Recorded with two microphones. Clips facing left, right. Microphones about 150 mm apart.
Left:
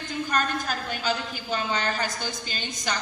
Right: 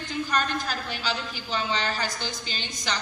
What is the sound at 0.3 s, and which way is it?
A woman's voice, 45° left (ahead or behind).